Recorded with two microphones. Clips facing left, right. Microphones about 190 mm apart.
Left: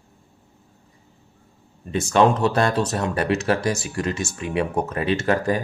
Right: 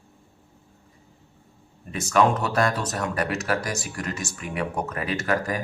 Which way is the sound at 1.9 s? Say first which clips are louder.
Left 3 dB; 30° left (ahead or behind).